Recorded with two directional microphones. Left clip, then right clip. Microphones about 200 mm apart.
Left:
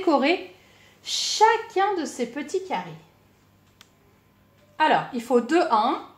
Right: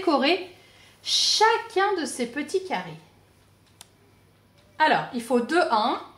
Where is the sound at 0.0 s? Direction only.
20° left (ahead or behind).